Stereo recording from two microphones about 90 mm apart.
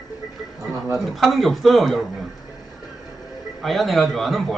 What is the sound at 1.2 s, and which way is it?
Speech, centre (ahead or behind).